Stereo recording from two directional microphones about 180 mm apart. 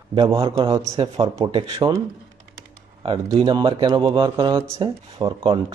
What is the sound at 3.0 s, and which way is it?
A man's voice, 30° right (ahead or behind).